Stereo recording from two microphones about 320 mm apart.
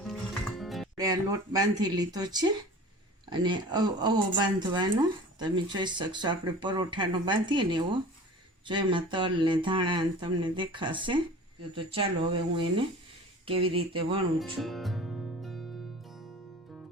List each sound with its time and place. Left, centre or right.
0.0 s music: centre
0.9 s speech: centre
14.3 s music: centre